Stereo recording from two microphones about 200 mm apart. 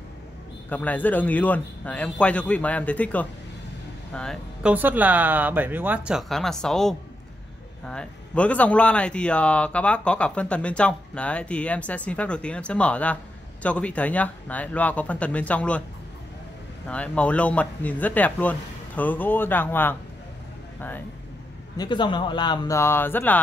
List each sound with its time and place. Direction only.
0.7 s a man's voice: 10° left (ahead or behind)
4.7 s a man's voice: 10° right (ahead or behind); by 15.8 s 5° left (ahead or behind)
16.8 s a man's voice: 5° left (ahead or behind)
21.7 s speech: 20° left (ahead or behind)